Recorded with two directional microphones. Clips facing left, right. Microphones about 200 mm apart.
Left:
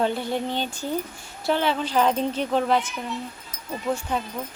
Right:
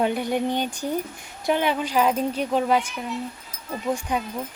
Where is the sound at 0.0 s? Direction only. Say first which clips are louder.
Right 2 dB; 15° right (ahead or behind).